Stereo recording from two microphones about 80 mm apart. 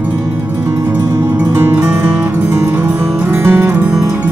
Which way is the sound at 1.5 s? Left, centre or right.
Right.